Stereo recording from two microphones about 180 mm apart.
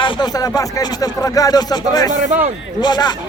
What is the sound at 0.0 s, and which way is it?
Speech, 25° left (ahead or behind).